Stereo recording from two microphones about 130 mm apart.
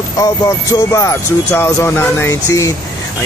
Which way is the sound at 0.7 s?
25° left (ahead or behind).